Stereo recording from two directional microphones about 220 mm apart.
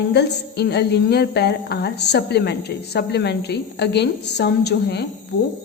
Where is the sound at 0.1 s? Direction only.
50° left (ahead or behind).